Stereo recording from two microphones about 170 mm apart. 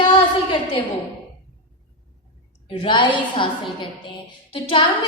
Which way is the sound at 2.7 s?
30° left (ahead or behind).